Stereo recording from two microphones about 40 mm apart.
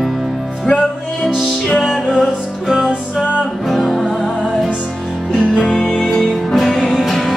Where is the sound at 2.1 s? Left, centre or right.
Centre.